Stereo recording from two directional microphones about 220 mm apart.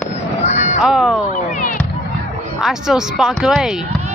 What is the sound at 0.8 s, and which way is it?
Music, centre (ahead or behind).